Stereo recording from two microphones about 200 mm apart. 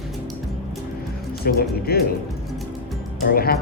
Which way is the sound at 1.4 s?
50° left (ahead or behind).